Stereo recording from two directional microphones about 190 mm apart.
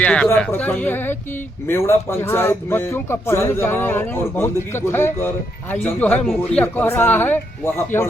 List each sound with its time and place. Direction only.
0.0 s speech: 5° left (ahead or behind)